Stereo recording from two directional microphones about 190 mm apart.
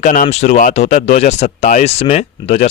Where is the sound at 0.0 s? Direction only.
40° left (ahead or behind).